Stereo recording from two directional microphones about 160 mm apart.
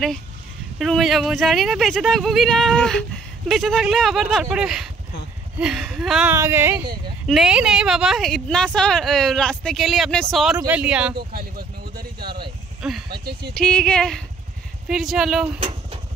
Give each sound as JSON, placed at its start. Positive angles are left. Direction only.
{"t": 0.7, "sound": "speech", "side_deg": 0}
{"t": 6.3, "sound": "speech", "side_deg": -15}
{"t": 7.2, "sound": "speech", "side_deg": -5}
{"t": 11.1, "sound": "a sound", "side_deg": -70}
{"t": 13.1, "sound": "speech", "side_deg": -80}
{"t": 13.6, "sound": "speech", "side_deg": 5}